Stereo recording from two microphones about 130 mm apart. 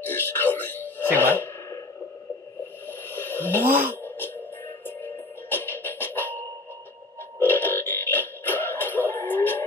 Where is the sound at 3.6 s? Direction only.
15° right (ahead or behind).